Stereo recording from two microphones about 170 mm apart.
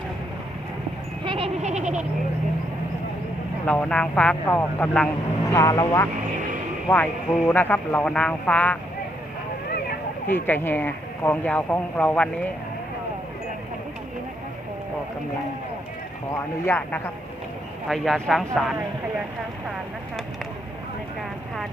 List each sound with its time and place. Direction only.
1.2 s goat: 30° right (ahead or behind)
1.6 s goat: 45° right (ahead or behind)
3.7 s speech: 5° left (ahead or behind)
6.8 s speech: 5° left (ahead or behind)
10.2 s speech: 10° left (ahead or behind)
16.6 s speech: 10° left (ahead or behind)